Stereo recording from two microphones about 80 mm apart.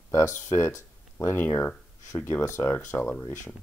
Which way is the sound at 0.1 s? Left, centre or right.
Left.